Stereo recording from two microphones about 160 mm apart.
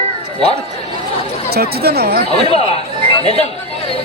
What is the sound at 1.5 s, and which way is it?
Speech, 80° right.